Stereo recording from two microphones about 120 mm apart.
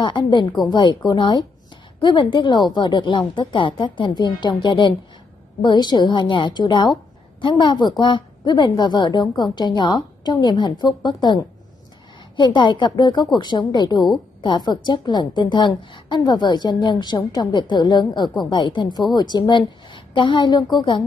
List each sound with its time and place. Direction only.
0.0 s a woman's voice: 40° left (ahead or behind)